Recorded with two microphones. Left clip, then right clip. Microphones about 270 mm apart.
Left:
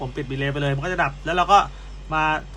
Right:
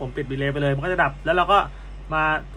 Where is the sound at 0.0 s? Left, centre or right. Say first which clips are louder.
Right 1 dB; centre.